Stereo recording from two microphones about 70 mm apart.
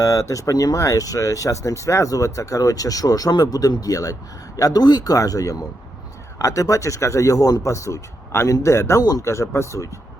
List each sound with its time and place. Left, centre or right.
0.0 s speech: left
7.7 s speech: left
9.0 s speech: left
9.2 s speech: left